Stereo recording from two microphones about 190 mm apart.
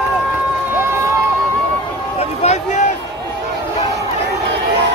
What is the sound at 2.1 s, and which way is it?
Run, 35° left (ahead or behind).